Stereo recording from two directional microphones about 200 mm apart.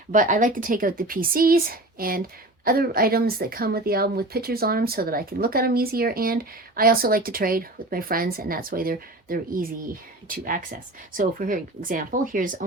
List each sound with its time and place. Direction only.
0.1 s speech: 40° right (ahead or behind)